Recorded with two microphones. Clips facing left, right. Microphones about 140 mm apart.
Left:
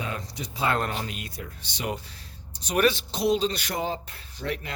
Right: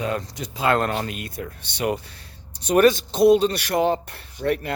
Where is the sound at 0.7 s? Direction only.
60° right (ahead or behind).